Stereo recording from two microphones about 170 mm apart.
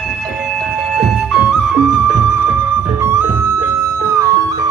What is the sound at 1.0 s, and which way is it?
Music, centre (ahead or behind).